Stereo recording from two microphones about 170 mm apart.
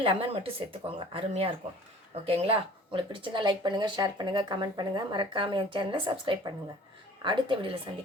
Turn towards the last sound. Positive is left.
turn(degrees=-30)  # may be behind; listen again after turning